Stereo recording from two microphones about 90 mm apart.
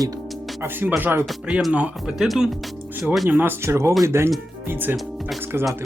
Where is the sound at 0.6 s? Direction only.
20° right (ahead or behind).